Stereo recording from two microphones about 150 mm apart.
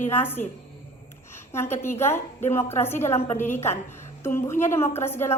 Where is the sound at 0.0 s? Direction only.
15° left (ahead or behind).